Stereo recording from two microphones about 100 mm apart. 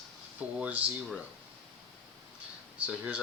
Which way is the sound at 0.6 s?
15° right (ahead or behind).